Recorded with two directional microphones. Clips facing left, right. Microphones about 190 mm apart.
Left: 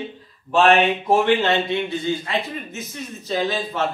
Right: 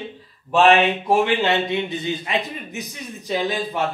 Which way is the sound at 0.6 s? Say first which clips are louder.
Right 1 dB; 10° right (ahead or behind).